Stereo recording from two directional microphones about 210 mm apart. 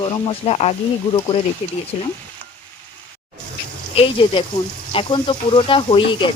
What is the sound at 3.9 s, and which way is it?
Speech, 25° left (ahead or behind).